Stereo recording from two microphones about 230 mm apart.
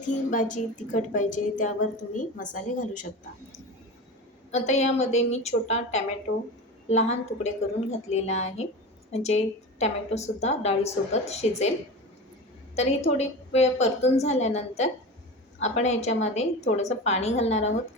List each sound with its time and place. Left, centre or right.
0.0 s speech: left
4.5 s a woman's voice: left
12.7 s a woman's voice: left